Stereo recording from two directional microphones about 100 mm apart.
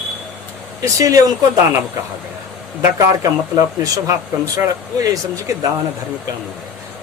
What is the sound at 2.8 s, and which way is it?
Speech, 35° right (ahead or behind).